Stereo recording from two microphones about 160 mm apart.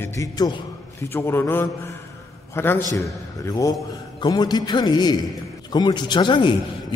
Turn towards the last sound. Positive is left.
turn(degrees=30)  # may be behind; listen again after turning